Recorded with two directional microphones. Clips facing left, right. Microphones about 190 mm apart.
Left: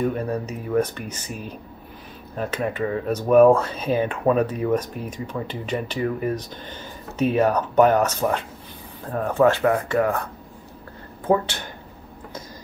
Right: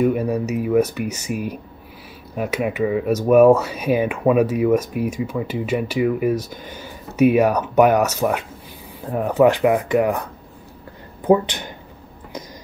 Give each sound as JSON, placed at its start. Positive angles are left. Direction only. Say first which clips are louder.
{"t": 0.0, "sound": "speech", "louder": "right 5 dB", "side_deg": -10}
{"t": 11.2, "sound": "speech", "louder": "right 5 dB", "side_deg": -15}